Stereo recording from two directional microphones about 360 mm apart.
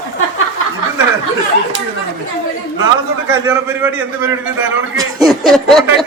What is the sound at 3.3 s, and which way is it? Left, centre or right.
Speech, centre.